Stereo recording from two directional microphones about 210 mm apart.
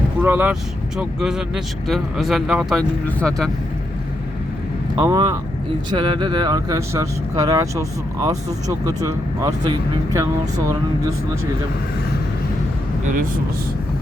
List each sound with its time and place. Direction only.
0.2 s speech: 10° right (ahead or behind)
4.9 s speech: 15° right (ahead or behind)